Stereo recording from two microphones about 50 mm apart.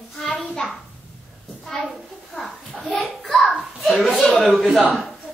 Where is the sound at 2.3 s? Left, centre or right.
Centre.